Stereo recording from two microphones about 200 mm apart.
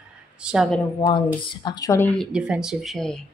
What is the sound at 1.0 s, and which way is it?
Speech, 25° left (ahead or behind).